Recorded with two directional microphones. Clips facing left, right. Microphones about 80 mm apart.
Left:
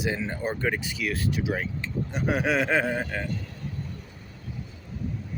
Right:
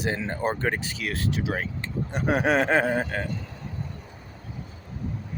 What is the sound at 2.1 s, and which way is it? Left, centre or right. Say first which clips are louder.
Speech: right 3 dB; right.